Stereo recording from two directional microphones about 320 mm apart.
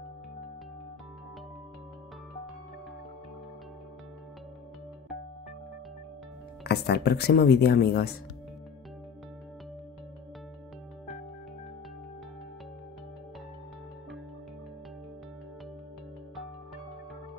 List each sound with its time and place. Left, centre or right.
6.6 s speech: left